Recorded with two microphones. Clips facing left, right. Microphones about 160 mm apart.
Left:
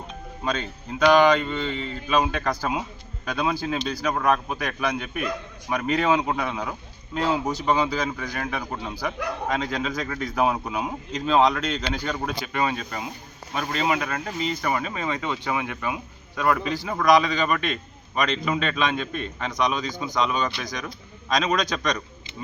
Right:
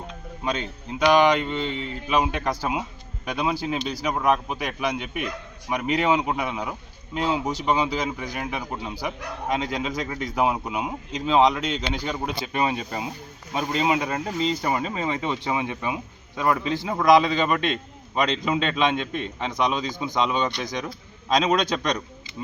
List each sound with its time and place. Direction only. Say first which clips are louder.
0.4 s a man's voice: even; 20° right (ahead or behind)